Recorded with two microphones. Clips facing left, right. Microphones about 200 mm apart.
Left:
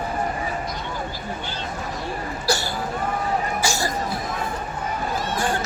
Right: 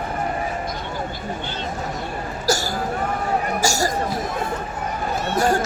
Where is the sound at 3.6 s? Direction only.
45° right (ahead or behind).